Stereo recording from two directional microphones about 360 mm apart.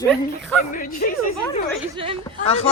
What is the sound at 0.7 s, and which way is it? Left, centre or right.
Speech, left.